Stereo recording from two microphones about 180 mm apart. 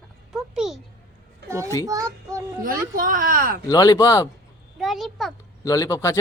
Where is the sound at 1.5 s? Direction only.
15° right (ahead or behind).